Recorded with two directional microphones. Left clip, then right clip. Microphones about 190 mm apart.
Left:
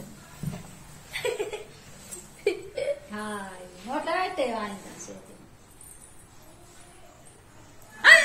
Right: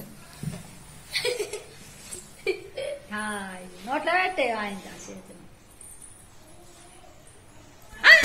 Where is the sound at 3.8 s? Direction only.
30° right (ahead or behind).